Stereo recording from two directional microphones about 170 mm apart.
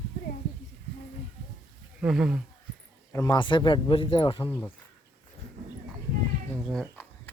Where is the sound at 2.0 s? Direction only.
5° right (ahead or behind).